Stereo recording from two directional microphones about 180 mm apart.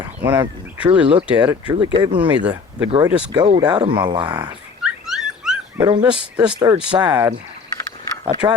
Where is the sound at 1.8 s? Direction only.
25° right (ahead or behind).